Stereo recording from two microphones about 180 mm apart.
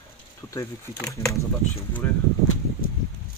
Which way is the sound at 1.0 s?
15° left (ahead or behind).